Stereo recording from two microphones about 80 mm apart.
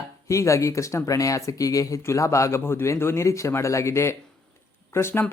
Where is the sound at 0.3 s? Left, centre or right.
Left.